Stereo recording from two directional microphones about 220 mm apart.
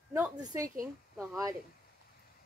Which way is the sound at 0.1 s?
15° right (ahead or behind).